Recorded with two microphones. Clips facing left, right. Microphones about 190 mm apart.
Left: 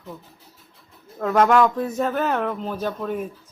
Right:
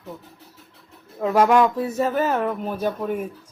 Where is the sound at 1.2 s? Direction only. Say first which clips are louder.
Even; 10° right (ahead or behind).